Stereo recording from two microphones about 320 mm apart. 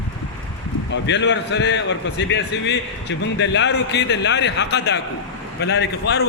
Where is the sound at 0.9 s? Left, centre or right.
Left.